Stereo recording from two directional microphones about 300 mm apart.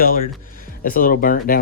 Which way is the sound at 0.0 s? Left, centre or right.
Left.